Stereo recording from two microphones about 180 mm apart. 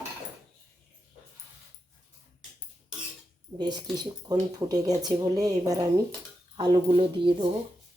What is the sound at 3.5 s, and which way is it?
Speech, 25° right (ahead or behind).